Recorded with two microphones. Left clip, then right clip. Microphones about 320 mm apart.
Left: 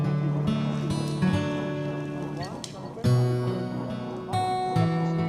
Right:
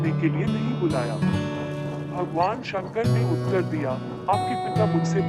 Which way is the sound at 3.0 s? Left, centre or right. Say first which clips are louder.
Even; centre.